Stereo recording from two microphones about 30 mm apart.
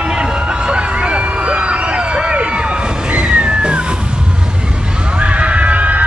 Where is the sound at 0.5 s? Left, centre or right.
Right.